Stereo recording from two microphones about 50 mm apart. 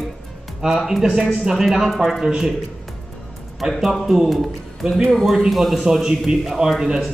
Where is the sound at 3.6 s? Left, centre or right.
Centre.